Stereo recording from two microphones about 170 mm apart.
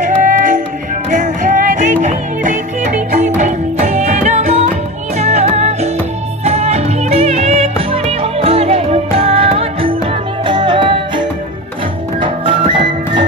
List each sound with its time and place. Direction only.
0.2 s music: 50° right (ahead or behind); by 13.2 s 30° right (ahead or behind)